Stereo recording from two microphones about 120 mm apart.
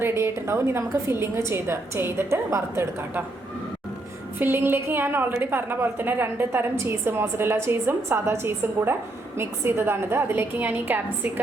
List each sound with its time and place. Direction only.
0.0 s a woman's voice: 20° right (ahead or behind)
4.4 s a woman's voice: 15° right (ahead or behind)